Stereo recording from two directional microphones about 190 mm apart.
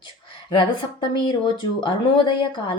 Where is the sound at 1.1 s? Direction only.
25° left (ahead or behind).